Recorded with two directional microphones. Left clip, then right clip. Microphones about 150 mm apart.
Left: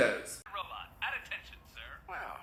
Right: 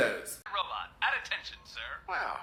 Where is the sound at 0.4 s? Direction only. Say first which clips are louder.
Right 7 dB; 30° right (ahead or behind).